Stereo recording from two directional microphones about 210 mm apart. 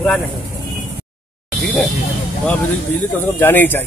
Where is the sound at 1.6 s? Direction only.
5° left (ahead or behind).